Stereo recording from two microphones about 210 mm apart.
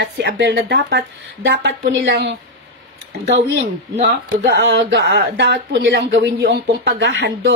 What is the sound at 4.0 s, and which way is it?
Speech, 55° right (ahead or behind).